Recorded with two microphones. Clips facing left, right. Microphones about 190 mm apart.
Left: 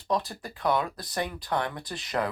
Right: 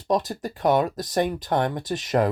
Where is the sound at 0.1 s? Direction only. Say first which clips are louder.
Right 6 dB; 40° right (ahead or behind).